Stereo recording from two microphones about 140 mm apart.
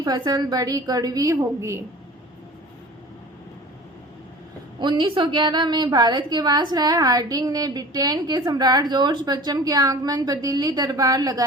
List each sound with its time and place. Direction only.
0.0 s a woman's voice: 30° right (ahead or behind)
4.8 s a woman's voice: 35° right (ahead or behind)